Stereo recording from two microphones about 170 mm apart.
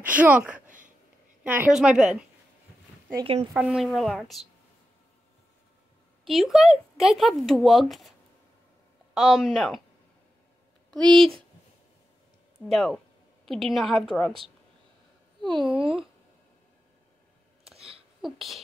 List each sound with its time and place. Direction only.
0.1 s speech: 10° right (ahead or behind)
0.7 s a sound: 50° right (ahead or behind)
1.4 s speech: 10° right (ahead or behind)
3.5 s speech: 5° right (ahead or behind)
6.2 s speech: centre (ahead or behind)
9.1 s speech: centre (ahead or behind)
11.1 s speech: 30° right (ahead or behind)
12.5 s speech: centre (ahead or behind)
15.4 s speech: centre (ahead or behind)
15.7 s speech: 30° right (ahead or behind)
17.7 s a sound: 35° right (ahead or behind)
18.2 s speech: centre (ahead or behind)